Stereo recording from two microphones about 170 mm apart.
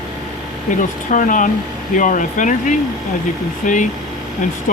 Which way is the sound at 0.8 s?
50° left (ahead or behind).